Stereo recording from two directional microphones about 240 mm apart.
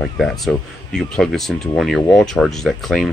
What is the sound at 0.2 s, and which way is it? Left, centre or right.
Speech, centre.